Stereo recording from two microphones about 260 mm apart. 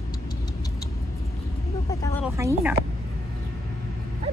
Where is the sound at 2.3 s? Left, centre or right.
Centre.